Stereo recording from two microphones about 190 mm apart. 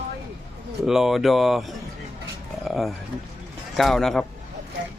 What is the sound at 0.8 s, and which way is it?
Speech, centre (ahead or behind).